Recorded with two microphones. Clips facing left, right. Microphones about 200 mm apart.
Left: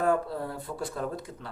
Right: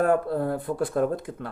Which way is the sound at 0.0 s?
55° right (ahead or behind).